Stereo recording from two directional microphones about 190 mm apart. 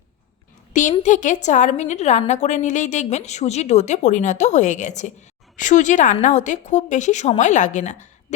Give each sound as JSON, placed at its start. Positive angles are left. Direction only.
{"t": 0.7, "sound": "a woman's voice", "side_deg": 40}